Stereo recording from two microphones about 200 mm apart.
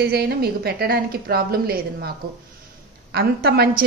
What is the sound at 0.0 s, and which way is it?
A woman's voice, 55° right (ahead or behind).